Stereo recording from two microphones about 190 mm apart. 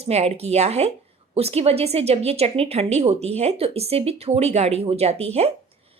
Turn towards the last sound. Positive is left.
turn(degrees=-35)  # may be behind; listen again after turning